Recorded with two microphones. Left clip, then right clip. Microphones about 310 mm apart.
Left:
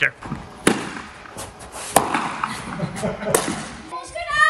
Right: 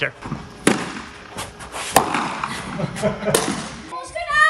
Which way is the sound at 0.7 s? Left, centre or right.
Centre.